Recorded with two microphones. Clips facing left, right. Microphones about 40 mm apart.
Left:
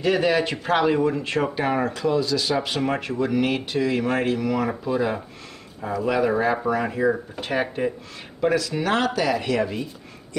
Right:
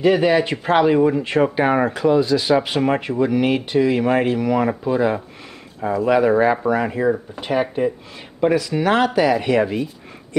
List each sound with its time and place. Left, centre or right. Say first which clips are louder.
0.0 s speech: right 5 dB; centre
8.4 s speech: right 4 dB; centre